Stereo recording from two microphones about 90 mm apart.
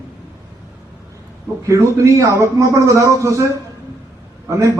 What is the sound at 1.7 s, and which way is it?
A man's voice, 35° right (ahead or behind).